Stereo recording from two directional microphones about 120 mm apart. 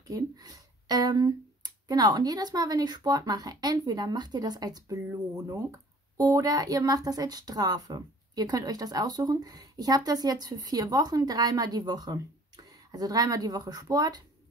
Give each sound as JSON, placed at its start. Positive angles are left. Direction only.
{"t": 0.0, "sound": "speech", "side_deg": -30}